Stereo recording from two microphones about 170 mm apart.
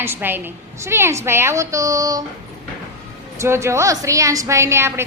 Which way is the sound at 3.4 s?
15° right (ahead or behind).